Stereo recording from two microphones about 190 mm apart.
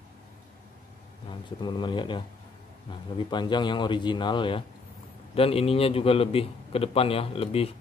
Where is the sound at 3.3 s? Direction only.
25° left (ahead or behind).